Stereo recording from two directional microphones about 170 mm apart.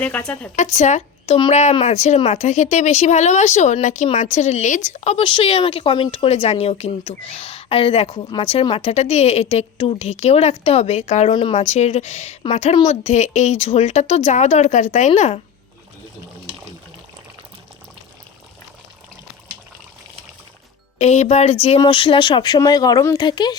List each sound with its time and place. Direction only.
0.0 s speech: 5° left (ahead or behind)
0.5 s speech: 45° left (ahead or behind)
21.0 s speech: 40° left (ahead or behind)